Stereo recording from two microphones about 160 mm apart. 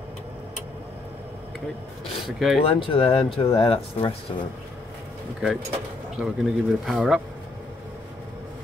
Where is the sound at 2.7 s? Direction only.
35° left (ahead or behind).